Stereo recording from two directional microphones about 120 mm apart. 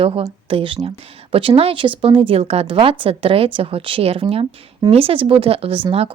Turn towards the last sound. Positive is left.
turn(degrees=-50)  # may be behind; listen again after turning